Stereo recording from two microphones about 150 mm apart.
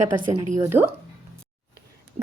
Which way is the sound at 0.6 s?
15° right (ahead or behind).